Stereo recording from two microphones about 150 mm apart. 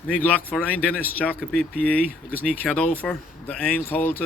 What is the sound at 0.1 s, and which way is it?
Speech, 10° left (ahead or behind).